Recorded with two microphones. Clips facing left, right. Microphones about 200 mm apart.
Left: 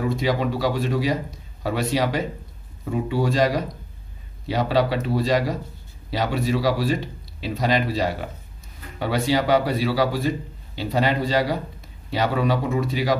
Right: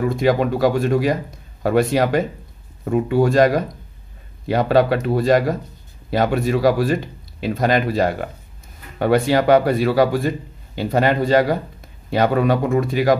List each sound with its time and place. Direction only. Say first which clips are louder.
0.1 s speech: right 5 dB; 50° right (ahead or behind)